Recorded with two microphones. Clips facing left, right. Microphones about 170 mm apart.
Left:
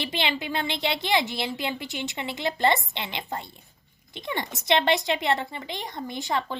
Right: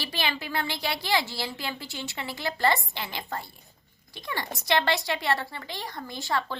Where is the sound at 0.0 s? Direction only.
20° left (ahead or behind).